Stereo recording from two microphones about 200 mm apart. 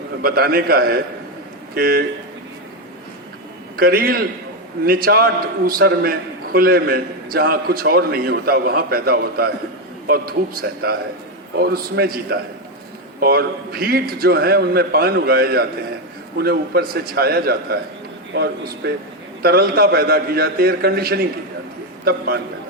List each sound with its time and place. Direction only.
0.2 s a man's voice: 50° right (ahead or behind)
3.8 s a man's voice: 50° right (ahead or behind)